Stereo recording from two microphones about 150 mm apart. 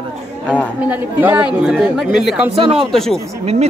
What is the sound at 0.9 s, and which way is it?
Speech, 10° right (ahead or behind).